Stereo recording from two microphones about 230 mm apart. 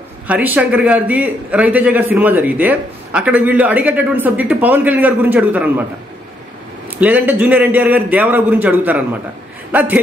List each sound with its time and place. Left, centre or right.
0.3 s a man's voice: centre
7.0 s a man's voice: centre